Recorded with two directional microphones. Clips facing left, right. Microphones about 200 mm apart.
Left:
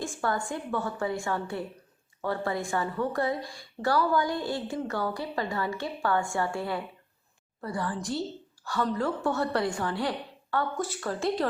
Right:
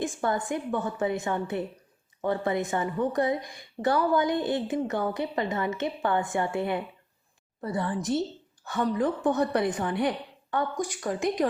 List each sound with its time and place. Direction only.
0.0 s a woman's voice: 20° right (ahead or behind)